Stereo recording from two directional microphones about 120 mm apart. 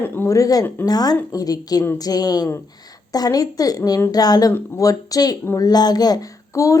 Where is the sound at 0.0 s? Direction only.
20° left (ahead or behind).